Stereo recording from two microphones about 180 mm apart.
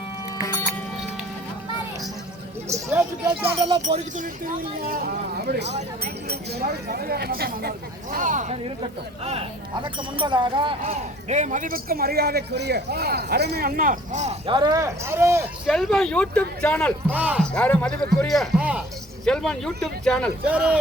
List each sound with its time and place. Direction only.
0.4 s music: 15° left (ahead or behind)
2.6 s speech: 15° right (ahead or behind)
3.4 s speech: 30° right (ahead or behind)
3.8 s speech: 45° right (ahead or behind)
8.1 s speech: 45° right (ahead or behind)
8.8 s speech: 35° right (ahead or behind)
14.5 s speech: 25° right (ahead or behind)
15.6 s a man's voice: centre (ahead or behind)
17.1 s speech: 10° right (ahead or behind)
17.4 s a man's voice: 5° left (ahead or behind)